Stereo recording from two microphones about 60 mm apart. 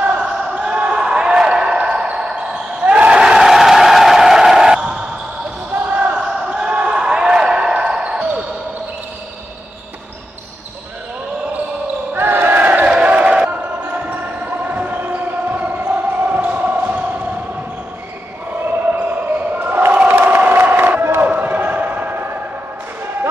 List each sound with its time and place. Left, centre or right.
0.0 s basketball bounce: right
3.2 s a sound: centre
5.9 s basketball bounce: right
6.2 s basketball bounce: centre
12.1 s battle cry: right
12.9 s a sound: right
18.7 s basketball bounce: right
20.2 s crowd: right
21.3 s basketball bounce: right